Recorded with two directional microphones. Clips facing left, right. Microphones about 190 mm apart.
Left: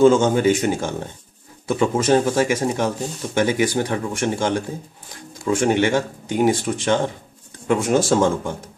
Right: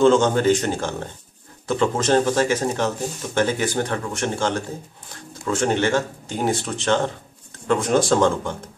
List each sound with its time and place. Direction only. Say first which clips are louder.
0.0 s speech: left 2 dB; 10° left (ahead or behind)